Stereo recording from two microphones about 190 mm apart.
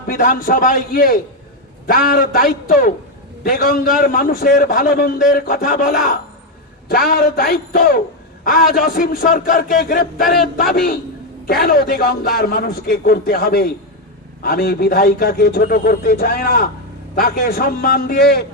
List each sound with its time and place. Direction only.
0.1 s a man's voice: 45° left (ahead or behind)